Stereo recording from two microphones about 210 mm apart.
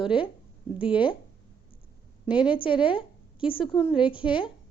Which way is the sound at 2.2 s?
5° right (ahead or behind).